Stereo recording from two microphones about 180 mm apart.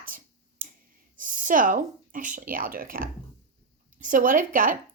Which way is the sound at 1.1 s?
50° right (ahead or behind).